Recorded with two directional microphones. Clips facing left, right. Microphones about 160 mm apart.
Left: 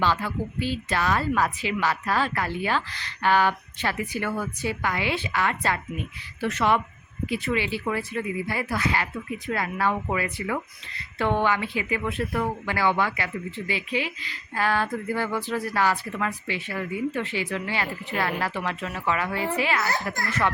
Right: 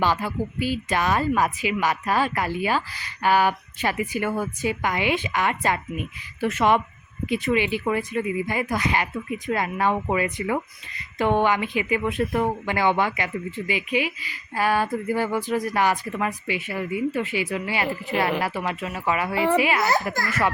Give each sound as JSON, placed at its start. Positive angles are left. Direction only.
{"t": 0.0, "sound": "speech", "side_deg": -15}